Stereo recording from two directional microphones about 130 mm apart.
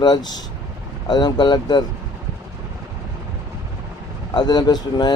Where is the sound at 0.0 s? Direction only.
30° left (ahead or behind).